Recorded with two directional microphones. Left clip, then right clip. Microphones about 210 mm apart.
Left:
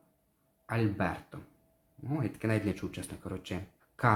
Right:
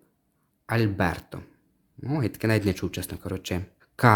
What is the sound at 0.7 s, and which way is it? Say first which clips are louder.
Speech: right 7 dB; 55° right (ahead or behind).